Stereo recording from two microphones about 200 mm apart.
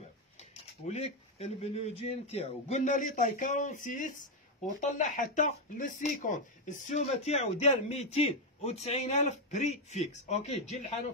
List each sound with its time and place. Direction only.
0.4 s speech: 35° left (ahead or behind)